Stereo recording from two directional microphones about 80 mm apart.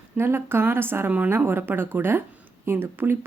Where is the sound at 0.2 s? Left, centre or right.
Right.